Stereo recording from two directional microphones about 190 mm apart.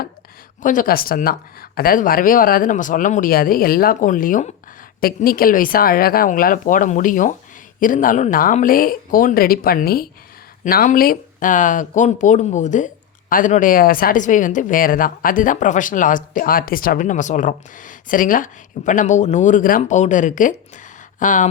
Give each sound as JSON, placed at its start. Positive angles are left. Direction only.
{"t": 0.6, "sound": "speech", "side_deg": 45}